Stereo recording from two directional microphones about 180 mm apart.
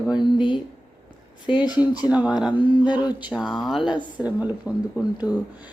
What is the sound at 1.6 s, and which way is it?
A woman's voice, 5° right (ahead or behind).